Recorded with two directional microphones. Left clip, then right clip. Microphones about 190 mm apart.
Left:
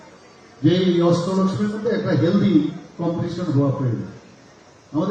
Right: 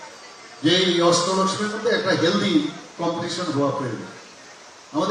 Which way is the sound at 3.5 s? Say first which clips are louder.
Left 1 dB; 30° left (ahead or behind).